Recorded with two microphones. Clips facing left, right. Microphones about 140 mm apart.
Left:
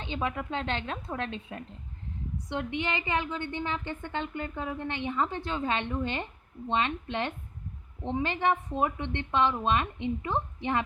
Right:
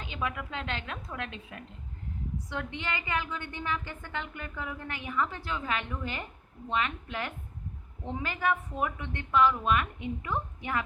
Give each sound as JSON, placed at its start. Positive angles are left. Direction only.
{"t": 0.0, "sound": "a woman's voice", "side_deg": 30}
{"t": 2.5, "sound": "a woman's voice", "side_deg": 20}